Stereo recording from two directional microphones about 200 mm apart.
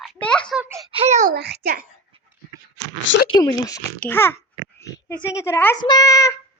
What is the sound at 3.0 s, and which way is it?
Speech, 65° left (ahead or behind).